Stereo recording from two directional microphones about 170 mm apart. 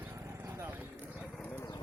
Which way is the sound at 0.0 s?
15° right (ahead or behind).